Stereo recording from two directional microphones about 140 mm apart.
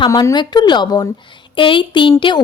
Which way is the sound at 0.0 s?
25° left (ahead or behind).